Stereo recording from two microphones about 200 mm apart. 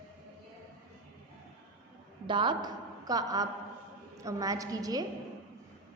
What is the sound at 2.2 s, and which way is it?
A woman's voice, 25° right (ahead or behind).